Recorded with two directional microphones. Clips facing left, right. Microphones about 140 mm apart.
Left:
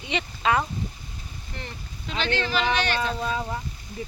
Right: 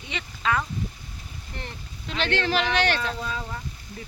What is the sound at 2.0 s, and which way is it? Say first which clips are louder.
Speech: right 1 dB; 70° right (ahead or behind).